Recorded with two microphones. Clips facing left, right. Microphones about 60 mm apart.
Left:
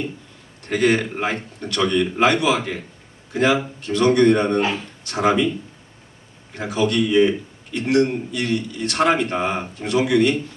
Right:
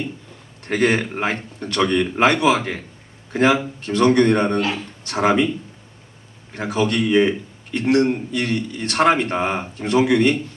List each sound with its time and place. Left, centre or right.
0.7 s a man's voice: right
6.5 s a man's voice: right